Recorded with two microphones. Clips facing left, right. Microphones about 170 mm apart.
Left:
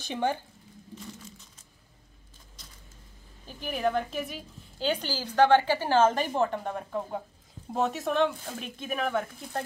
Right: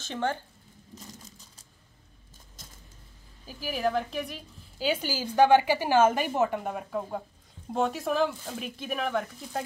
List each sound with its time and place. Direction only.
0.0 s speech: 15° left (ahead or behind)
2.6 s vehicle: 45° right (ahead or behind)
3.4 s a woman's voice: 5° right (ahead or behind)